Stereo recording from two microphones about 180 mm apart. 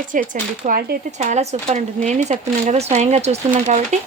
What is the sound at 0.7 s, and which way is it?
Speech, 60° right (ahead or behind).